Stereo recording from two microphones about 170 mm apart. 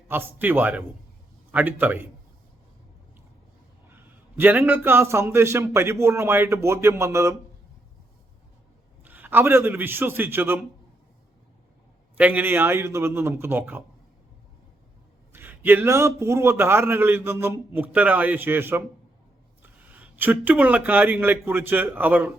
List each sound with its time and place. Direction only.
0.1 s a man's voice: 10° right (ahead or behind)
3.9 s a man's voice: 10° right (ahead or behind)
9.0 s a man's voice: 10° right (ahead or behind)
12.1 s a man's voice: 10° right (ahead or behind)
15.3 s a man's voice: 10° right (ahead or behind)